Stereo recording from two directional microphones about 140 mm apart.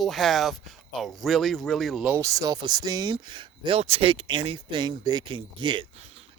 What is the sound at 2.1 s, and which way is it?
Speech, 25° right (ahead or behind).